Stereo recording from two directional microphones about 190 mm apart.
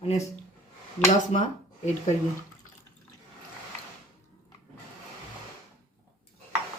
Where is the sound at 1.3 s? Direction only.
35° left (ahead or behind).